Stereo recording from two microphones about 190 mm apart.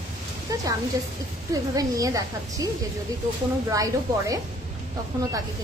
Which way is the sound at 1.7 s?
20° right (ahead or behind).